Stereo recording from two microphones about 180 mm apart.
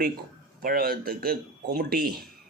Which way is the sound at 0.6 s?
55° right (ahead or behind).